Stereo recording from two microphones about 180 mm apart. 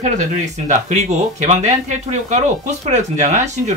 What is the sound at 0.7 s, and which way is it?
Speech, 40° right (ahead or behind).